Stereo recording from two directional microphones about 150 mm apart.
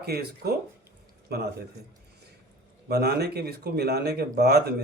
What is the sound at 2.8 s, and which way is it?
Speech, 90° right.